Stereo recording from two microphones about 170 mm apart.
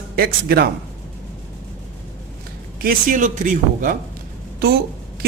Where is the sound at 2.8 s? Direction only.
50° right (ahead or behind).